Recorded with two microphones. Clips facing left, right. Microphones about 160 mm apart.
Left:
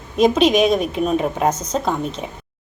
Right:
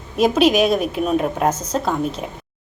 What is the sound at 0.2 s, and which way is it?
A woman's voice, 5° right (ahead or behind).